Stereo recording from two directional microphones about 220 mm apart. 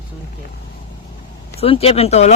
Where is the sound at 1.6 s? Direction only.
25° left (ahead or behind).